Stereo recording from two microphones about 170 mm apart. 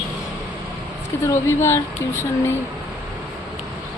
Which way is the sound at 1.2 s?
15° left (ahead or behind).